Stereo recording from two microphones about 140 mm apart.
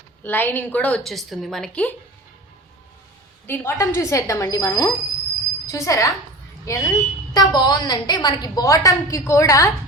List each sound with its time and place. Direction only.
0.2 s a woman's voice: 15° left (ahead or behind)
3.4 s a woman's voice: 15° left (ahead or behind)